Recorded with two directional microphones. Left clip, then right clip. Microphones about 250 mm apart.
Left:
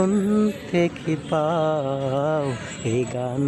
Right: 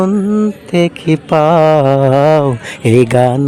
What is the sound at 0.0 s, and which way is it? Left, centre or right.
Music, right.